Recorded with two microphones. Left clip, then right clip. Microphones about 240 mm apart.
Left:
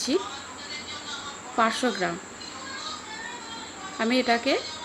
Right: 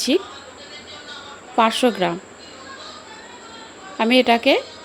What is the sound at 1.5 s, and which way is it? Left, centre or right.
Speech, right.